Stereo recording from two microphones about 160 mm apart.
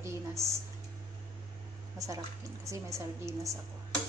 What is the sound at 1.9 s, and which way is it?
A woman's voice, 20° right (ahead or behind).